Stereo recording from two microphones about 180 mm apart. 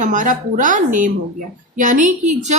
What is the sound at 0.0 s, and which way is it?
A woman's voice, 45° right (ahead or behind).